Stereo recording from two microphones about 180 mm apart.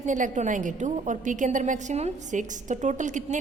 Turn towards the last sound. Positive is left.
turn(degrees=-45)  # may be behind; listen again after turning